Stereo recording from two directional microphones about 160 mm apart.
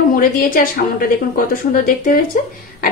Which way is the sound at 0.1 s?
65° left (ahead or behind).